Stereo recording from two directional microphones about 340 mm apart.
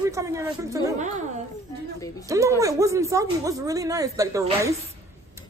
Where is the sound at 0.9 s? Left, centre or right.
Right.